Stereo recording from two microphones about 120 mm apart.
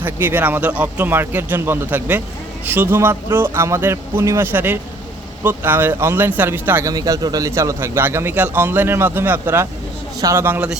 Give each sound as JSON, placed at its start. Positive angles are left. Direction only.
{"t": 0.0, "sound": "a man's voice", "side_deg": -15}
{"t": 6.9, "sound": "a man's voice", "side_deg": -30}